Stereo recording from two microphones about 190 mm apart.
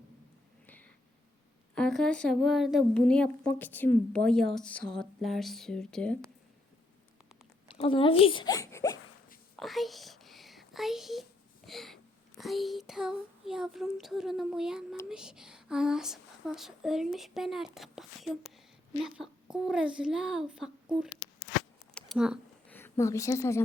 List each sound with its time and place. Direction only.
1.7 s a woman's voice: 5° left (ahead or behind)
7.8 s speech: 30° left (ahead or behind)
9.6 s a sound: centre (ahead or behind)
12.4 s a woman's voice: centre (ahead or behind)
21.9 s a sound: centre (ahead or behind)
22.7 s a woman's voice: 15° left (ahead or behind)